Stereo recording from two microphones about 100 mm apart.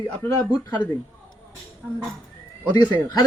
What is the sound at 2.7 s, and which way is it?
Speech, 45° left (ahead or behind).